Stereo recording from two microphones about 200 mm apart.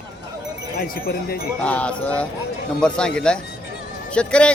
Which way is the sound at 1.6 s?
5° left (ahead or behind).